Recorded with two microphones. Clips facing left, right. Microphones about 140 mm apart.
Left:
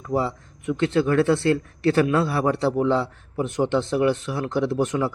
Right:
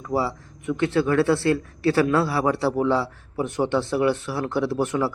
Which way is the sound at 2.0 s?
20° left (ahead or behind).